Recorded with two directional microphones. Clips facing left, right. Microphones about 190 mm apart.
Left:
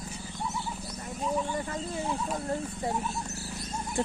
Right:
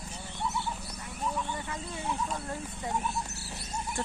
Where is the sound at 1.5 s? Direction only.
40° left (ahead or behind).